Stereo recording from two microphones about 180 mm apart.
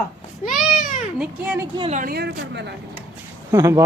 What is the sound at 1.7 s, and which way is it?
Speech, 30° right (ahead or behind).